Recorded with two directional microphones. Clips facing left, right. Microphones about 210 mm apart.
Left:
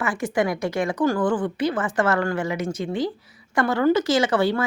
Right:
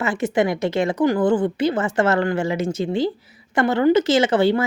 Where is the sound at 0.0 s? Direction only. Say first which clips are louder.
Right 3 dB; 25° right (ahead or behind).